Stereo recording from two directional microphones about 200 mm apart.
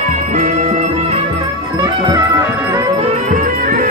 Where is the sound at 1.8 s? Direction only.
15° right (ahead or behind).